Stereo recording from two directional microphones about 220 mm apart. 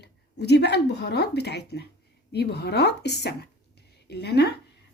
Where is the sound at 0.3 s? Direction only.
50° left (ahead or behind).